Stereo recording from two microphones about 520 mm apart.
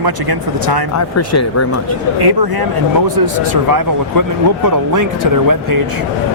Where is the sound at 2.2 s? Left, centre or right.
Right.